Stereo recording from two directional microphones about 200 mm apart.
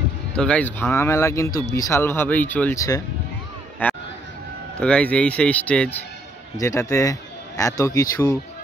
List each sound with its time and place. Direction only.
0.4 s speech: 5° left (ahead or behind)
3.8 s a sound: 10° left (ahead or behind)
4.7 s speech: 5° left (ahead or behind)